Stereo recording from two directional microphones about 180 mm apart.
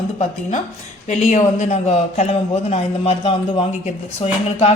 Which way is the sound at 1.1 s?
40° left (ahead or behind).